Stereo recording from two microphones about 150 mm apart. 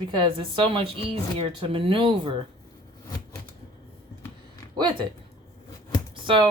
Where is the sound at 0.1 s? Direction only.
35° right (ahead or behind).